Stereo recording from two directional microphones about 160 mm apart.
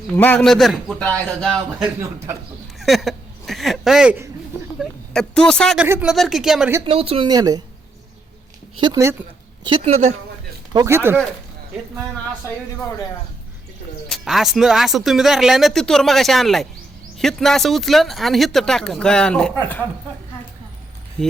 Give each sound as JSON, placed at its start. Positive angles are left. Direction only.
{"t": 0.1, "sound": "speech", "side_deg": 10}
{"t": 2.7, "sound": "hiccup", "side_deg": 0}
{"t": 4.8, "sound": "a woman's voice", "side_deg": 5}
{"t": 5.8, "sound": "speech", "side_deg": -10}
{"t": 6.8, "sound": "speech", "side_deg": -35}
{"t": 7.3, "sound": "a woman's voice", "side_deg": -25}
{"t": 8.8, "sound": "a woman's voice", "side_deg": -20}
{"t": 9.6, "sound": "speech", "side_deg": -40}
{"t": 10.7, "sound": "speech", "side_deg": -20}
{"t": 14.1, "sound": "speech", "side_deg": 0}